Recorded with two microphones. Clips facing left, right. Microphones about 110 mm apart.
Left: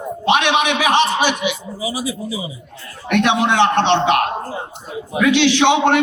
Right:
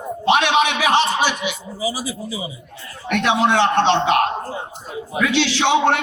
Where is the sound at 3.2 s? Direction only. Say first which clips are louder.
Left 1 dB; 20° left (ahead or behind).